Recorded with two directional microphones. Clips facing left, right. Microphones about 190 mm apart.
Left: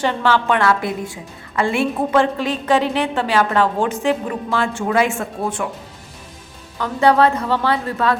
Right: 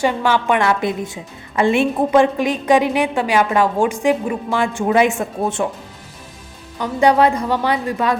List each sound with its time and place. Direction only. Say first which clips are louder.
0.0 s a woman's voice: right 1 dB; 10° right (ahead or behind)
6.7 s a woman's voice: right 1 dB; 15° right (ahead or behind)